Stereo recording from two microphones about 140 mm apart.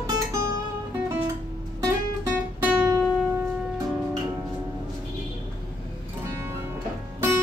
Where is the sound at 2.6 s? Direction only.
15° right (ahead or behind).